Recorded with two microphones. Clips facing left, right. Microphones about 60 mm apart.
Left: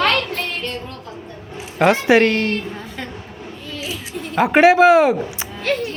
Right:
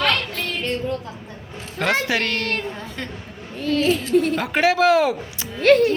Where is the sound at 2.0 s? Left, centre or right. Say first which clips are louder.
Left 9 dB; left.